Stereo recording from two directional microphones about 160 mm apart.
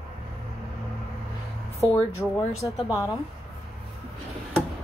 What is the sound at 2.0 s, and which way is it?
Speech, 20° left (ahead or behind).